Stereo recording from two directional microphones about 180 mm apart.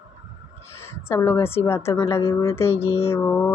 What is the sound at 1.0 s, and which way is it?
Speech, 10° left (ahead or behind).